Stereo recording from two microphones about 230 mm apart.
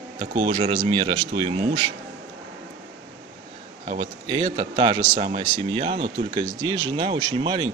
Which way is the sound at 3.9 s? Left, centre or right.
Right.